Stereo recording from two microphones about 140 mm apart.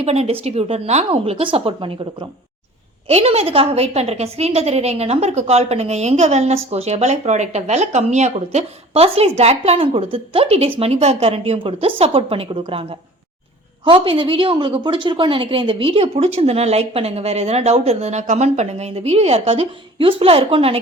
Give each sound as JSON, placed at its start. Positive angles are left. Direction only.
{"t": 0.0, "sound": "a woman's voice", "side_deg": -50}
{"t": 3.1, "sound": "a woman's voice", "side_deg": -45}